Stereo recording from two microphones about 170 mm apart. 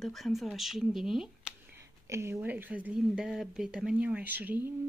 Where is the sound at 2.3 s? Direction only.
10° right (ahead or behind).